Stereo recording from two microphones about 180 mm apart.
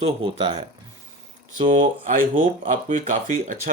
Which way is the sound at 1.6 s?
45° right (ahead or behind).